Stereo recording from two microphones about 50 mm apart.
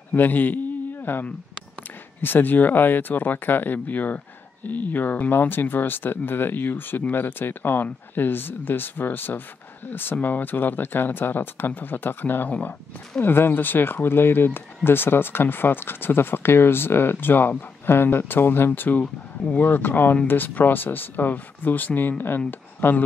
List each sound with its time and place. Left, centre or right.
0.1 s speech: left
2.2 s speech: left
18.7 s speech: left